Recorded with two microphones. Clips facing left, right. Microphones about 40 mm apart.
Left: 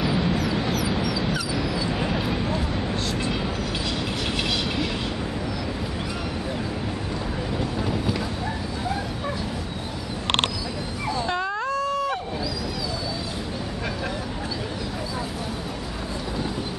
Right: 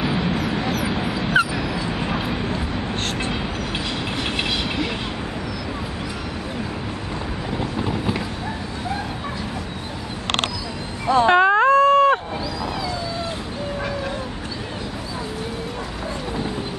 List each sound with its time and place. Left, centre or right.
0.0 s vehicle: centre
1.6 s dog: centre
2.0 s vehicle: centre
7.5 s vehicle: centre
11.1 s a sound: right